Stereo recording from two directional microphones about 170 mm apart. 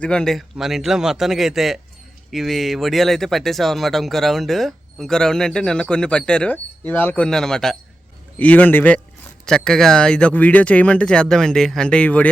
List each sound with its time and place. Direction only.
0.0 s speech: 5° left (ahead or behind)